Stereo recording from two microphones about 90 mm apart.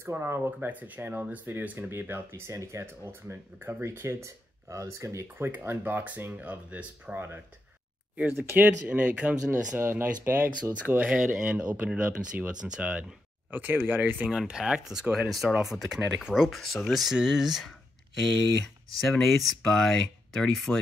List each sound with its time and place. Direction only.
0.0 s speech: 25° right (ahead or behind)
9.8 s speech: 25° right (ahead or behind)
14.3 s speech: 5° right (ahead or behind)
19.1 s speech: centre (ahead or behind)